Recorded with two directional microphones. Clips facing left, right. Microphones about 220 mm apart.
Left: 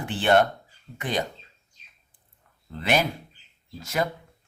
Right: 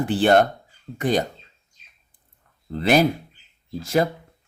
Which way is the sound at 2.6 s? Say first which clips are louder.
Right 7 dB; 35° right (ahead or behind).